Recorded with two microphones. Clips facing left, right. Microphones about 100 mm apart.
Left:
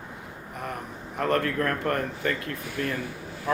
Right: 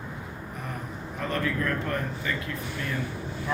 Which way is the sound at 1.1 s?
60° left (ahead or behind).